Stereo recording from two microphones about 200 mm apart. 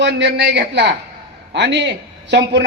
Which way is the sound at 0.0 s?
60° right (ahead or behind).